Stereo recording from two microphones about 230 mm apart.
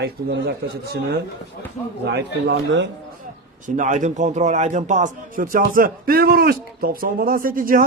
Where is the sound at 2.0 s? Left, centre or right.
Right.